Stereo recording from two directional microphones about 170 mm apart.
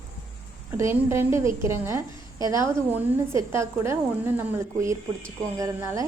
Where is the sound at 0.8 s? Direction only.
15° right (ahead or behind).